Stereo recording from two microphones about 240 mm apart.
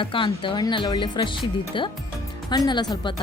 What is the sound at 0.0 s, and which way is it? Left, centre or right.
Speech, left.